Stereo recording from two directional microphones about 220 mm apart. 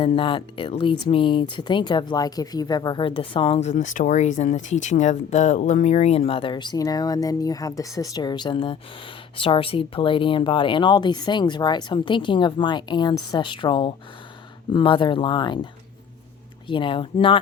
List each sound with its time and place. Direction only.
0.0 s speech: 25° left (ahead or behind)